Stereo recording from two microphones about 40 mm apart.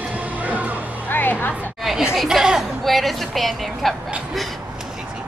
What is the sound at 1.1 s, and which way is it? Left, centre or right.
Music, left.